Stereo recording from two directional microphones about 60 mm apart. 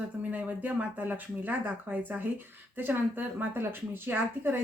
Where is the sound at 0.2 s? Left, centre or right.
Right.